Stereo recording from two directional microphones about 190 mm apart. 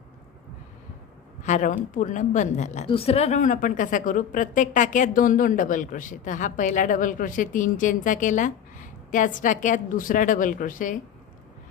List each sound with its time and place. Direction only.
1.5 s a woman's voice: 40° left (ahead or behind)